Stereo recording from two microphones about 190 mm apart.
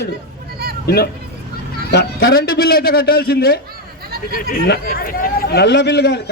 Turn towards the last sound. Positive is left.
turn(degrees=65)  # may be behind; listen again after turning